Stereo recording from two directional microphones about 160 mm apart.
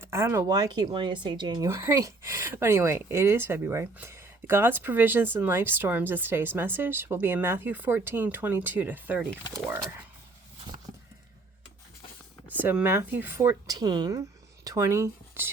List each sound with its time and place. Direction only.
0.0 s speech: 15° right (ahead or behind)
12.5 s speech: 10° right (ahead or behind)